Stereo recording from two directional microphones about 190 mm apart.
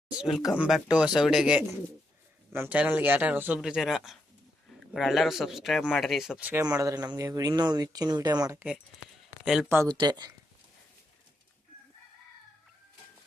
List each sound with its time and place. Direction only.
0.1 s speech: 5° right (ahead or behind); by 8.6 s 20° right (ahead or behind)
9.4 s speech: 5° right (ahead or behind)
9.6 s speech: 15° right (ahead or behind)